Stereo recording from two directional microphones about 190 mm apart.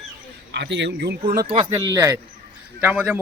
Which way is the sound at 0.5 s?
65° right (ahead or behind).